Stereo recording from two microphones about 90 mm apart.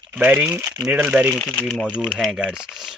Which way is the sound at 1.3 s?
5° left (ahead or behind).